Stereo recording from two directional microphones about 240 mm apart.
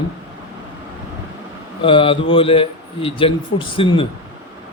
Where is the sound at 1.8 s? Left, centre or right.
Left.